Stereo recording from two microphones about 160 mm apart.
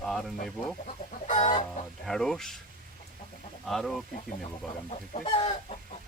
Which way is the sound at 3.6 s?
Centre (ahead or behind).